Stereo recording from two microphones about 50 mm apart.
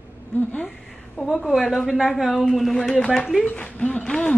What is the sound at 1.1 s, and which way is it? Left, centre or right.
A woman's voice, centre.